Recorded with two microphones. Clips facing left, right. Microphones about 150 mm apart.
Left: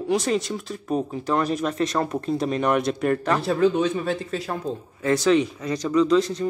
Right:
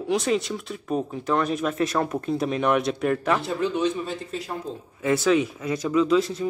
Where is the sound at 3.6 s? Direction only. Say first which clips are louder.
Left 4 dB; 55° left (ahead or behind); by 4.5 s 75° left (ahead or behind).